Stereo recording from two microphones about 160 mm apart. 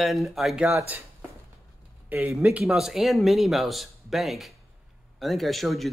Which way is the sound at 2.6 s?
Centre (ahead or behind).